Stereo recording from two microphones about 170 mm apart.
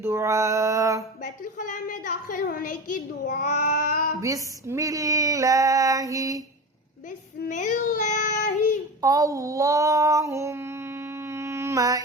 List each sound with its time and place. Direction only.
0.0 s female singing: 15° right (ahead or behind)
1.2 s a woman's voice: 50° left (ahead or behind)
4.2 s female singing: 15° right (ahead or behind)
7.4 s child singing: 50° left (ahead or behind)
9.0 s female singing: 20° right (ahead or behind)